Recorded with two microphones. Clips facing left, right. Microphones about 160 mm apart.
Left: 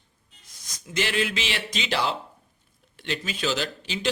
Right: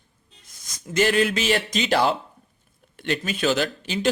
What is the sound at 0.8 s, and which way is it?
Speech, 45° right (ahead or behind).